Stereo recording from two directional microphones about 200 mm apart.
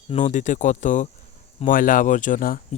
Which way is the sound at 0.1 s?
35° left (ahead or behind).